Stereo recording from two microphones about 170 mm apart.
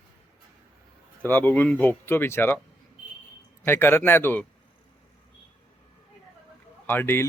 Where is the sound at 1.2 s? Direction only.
10° left (ahead or behind).